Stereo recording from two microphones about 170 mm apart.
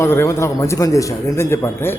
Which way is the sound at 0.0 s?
15° left (ahead or behind).